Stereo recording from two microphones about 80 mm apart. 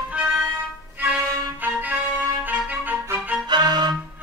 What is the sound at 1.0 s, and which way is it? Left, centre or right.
Violin, centre.